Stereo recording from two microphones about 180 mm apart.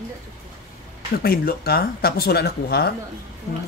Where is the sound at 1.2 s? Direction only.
55° left (ahead or behind).